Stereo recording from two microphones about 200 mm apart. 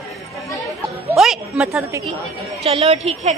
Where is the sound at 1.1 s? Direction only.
Centre (ahead or behind).